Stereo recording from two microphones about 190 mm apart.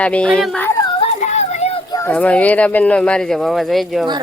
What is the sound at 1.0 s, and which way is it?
Music, 35° left (ahead or behind).